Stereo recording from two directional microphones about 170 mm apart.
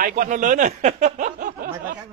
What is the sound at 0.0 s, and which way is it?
Speech, 50° right (ahead or behind).